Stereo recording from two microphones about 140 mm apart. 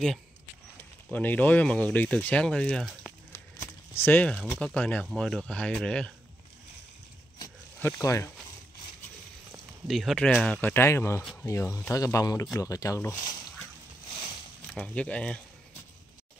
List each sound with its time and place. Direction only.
1.1 s speech: 10° left (ahead or behind)
3.9 s speech: 15° left (ahead or behind)
7.8 s speech: 20° left (ahead or behind)
9.8 s speech: centre (ahead or behind)
10.6 s speech: 15° left (ahead or behind)
14.7 s speech: 5° left (ahead or behind)